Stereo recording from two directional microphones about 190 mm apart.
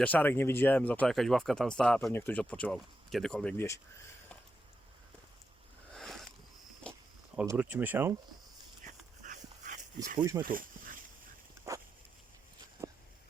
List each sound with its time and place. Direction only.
0.0 s speech: 10° left (ahead or behind)
5.9 s a sound: centre (ahead or behind)
7.4 s speech: 10° right (ahead or behind)
8.8 s dog: 40° right (ahead or behind)
10.2 s speech: 15° right (ahead or behind)
10.4 s speech: 45° right (ahead or behind)